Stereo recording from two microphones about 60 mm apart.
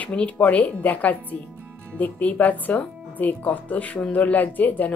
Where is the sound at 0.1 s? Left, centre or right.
Centre.